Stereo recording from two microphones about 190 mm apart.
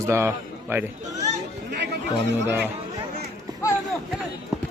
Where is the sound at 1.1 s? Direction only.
40° right (ahead or behind).